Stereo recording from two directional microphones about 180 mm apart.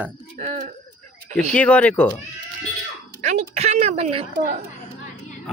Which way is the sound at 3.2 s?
40° right (ahead or behind).